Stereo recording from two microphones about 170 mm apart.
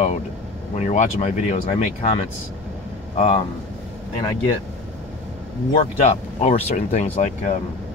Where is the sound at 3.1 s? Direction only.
35° left (ahead or behind).